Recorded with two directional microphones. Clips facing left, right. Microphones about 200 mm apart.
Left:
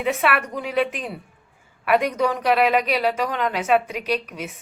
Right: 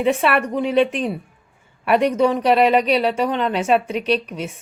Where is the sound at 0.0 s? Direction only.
30° right (ahead or behind).